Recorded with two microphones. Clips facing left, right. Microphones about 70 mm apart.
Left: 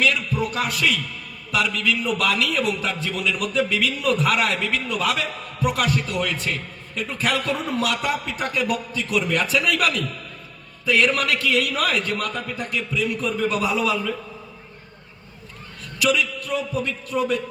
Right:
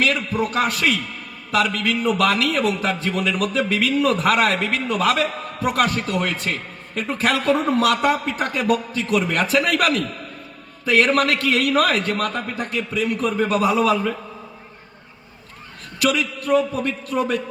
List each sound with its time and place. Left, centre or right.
0.0 s a man's voice: right
16.0 s a man's voice: right